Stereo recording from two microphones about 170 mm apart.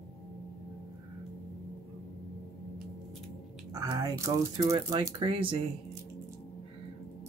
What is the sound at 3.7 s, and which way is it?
Speech, 20° right (ahead or behind).